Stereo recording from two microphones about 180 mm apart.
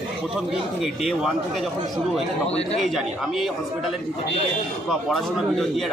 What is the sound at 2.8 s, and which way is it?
Speech, centre (ahead or behind).